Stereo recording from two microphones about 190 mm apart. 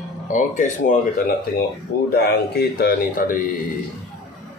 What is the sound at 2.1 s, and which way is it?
Speech, 55° left (ahead or behind).